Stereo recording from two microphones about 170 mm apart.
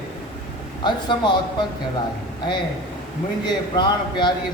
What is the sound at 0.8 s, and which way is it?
Speech, 25° left (ahead or behind).